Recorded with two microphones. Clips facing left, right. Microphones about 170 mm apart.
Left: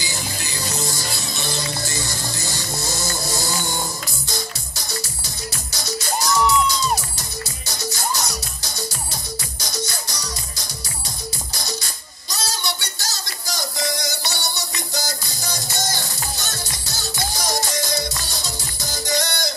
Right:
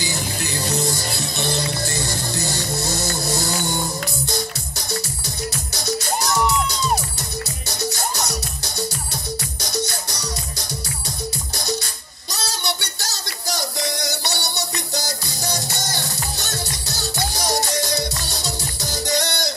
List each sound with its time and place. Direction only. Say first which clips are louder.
0.0 s music: right 4 dB; 60° right (ahead or behind)
5.7 s music: right 1 dB; 60° right (ahead or behind)
12.3 s a sound: right 1 dB; 65° right (ahead or behind)
17.3 s music: right 2 dB; 65° right (ahead or behind)